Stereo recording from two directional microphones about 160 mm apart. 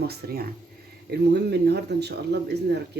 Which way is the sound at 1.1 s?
90° right.